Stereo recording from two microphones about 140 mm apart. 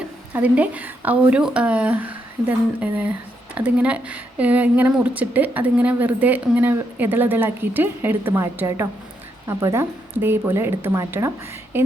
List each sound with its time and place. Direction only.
0.3 s speech: 10° right (ahead or behind)